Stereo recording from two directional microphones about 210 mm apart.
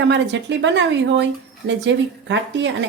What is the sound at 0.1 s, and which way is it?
Speech, 60° right (ahead or behind).